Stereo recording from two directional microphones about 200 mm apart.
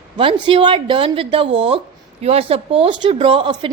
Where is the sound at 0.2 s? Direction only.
25° right (ahead or behind).